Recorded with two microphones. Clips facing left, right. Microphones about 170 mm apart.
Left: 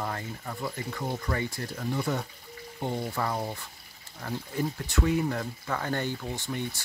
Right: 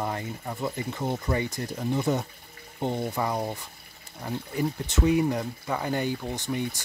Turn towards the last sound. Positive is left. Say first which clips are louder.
# right 3 dB
turn(degrees=-15)  # may be behind; listen again after turning